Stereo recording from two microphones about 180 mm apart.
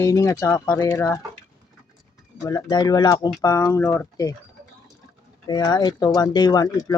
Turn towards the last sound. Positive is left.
turn(degrees=20)  # may be behind; listen again after turning